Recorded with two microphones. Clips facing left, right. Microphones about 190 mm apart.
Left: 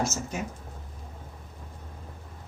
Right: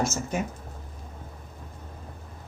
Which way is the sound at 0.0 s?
55° right (ahead or behind).